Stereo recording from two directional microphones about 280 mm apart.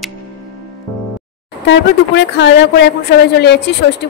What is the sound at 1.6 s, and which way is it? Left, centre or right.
A woman's voice, left.